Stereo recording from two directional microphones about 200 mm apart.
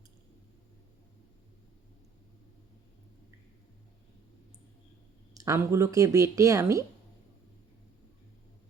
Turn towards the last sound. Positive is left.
turn(degrees=-15)  # may be behind; listen again after turning